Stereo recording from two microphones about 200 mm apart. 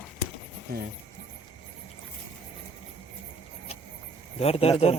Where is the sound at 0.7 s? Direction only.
50° right (ahead or behind).